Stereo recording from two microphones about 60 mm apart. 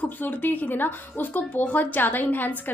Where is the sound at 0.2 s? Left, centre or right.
Left.